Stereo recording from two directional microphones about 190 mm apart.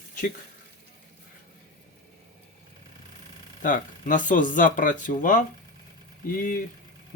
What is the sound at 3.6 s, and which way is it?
Speech, 45° left (ahead or behind).